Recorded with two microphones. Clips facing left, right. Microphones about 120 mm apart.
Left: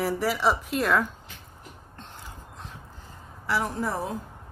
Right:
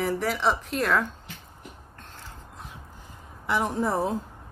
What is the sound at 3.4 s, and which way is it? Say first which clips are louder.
Speech: right 2 dB; 20° right (ahead or behind).